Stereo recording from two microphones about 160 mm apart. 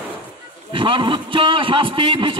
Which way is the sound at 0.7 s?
30° right (ahead or behind).